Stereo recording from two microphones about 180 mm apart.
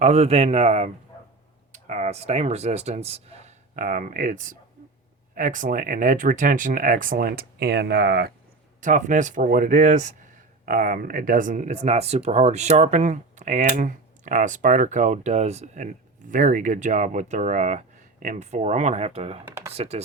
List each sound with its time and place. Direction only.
0.0 s speech: 35° right (ahead or behind)
1.9 s speech: 40° right (ahead or behind); by 8.3 s 65° right (ahead or behind)
8.8 s speech: 45° right (ahead or behind)